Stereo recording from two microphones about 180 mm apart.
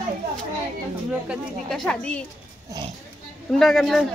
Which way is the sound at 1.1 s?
Centre (ahead or behind).